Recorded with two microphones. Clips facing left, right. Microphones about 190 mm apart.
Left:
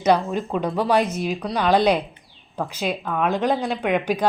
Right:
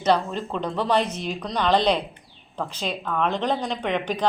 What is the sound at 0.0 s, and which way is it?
Speech, 10° left (ahead or behind).